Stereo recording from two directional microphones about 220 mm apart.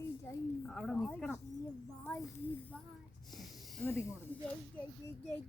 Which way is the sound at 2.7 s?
Centre (ahead or behind).